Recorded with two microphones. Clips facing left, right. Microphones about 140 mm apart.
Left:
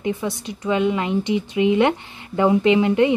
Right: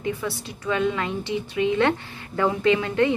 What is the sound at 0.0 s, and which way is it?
A woman's voice, 20° left (ahead or behind).